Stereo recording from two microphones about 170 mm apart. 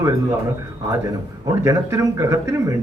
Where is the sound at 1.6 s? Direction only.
20° right (ahead or behind).